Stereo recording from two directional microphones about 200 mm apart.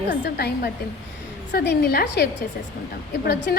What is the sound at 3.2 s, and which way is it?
Speech, 55° left (ahead or behind).